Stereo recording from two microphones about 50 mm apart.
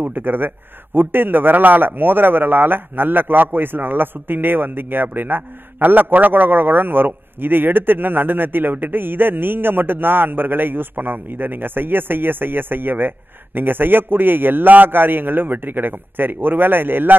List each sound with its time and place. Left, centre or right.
0.0 s a man's voice: right